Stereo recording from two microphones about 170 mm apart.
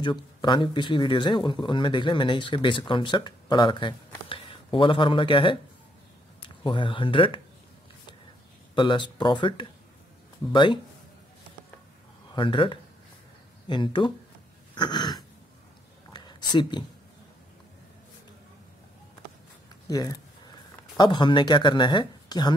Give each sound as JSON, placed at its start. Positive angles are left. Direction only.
{"t": 0.0, "sound": "speech", "side_deg": 25}
{"t": 6.6, "sound": "speech", "side_deg": 30}
{"t": 8.7, "sound": "speech", "side_deg": 25}
{"t": 12.4, "sound": "speech", "side_deg": 30}
{"t": 16.1, "sound": "a sound", "side_deg": 25}
{"t": 19.9, "sound": "a sound", "side_deg": 20}
{"t": 21.0, "sound": "speech", "side_deg": 25}